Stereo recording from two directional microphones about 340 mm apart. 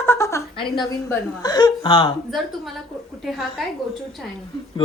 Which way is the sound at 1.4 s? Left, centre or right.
Centre.